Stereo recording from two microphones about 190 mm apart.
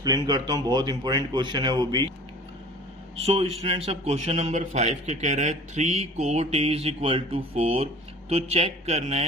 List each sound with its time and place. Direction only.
0.3 s speech: 20° right (ahead or behind)
3.2 s a man's voice: 30° right (ahead or behind)